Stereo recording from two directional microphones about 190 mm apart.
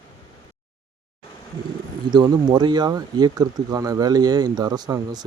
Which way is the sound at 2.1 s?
20° right (ahead or behind).